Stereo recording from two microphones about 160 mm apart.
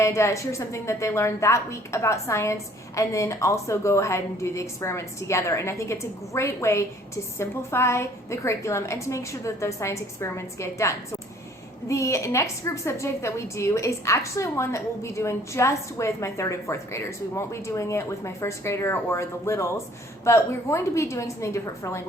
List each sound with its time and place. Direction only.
0.0 s a woman's voice: 15° left (ahead or behind)